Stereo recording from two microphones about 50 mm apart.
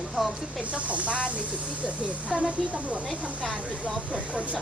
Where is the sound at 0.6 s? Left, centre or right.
Right.